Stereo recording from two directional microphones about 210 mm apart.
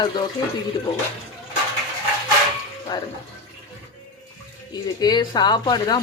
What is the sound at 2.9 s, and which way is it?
Speech, 20° left (ahead or behind).